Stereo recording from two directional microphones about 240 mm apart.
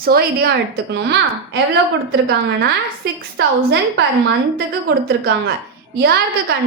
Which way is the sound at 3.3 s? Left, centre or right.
Right.